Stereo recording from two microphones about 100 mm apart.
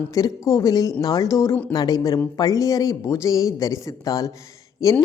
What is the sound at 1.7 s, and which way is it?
A woman's voice, 40° left (ahead or behind).